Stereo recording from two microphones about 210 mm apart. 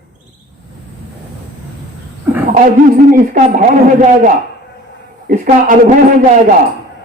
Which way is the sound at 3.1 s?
40° right (ahead or behind).